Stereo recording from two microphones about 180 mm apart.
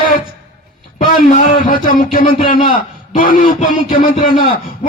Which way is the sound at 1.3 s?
50° left (ahead or behind).